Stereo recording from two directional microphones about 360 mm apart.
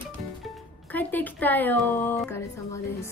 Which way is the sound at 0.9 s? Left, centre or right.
Centre.